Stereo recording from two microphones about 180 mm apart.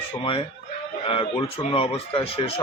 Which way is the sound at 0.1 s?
30° left (ahead or behind).